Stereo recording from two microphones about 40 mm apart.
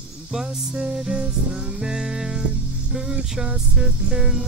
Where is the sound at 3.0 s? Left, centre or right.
Centre.